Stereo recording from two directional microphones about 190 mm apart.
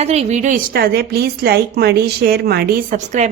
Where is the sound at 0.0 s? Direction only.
35° right (ahead or behind).